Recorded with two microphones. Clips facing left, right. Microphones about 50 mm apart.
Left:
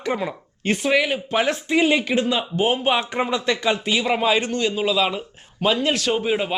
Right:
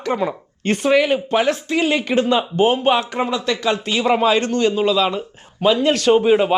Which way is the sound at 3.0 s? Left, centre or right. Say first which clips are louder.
Right 2 dB; centre.